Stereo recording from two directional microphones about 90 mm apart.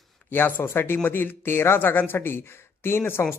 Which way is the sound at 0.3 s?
25° left (ahead or behind).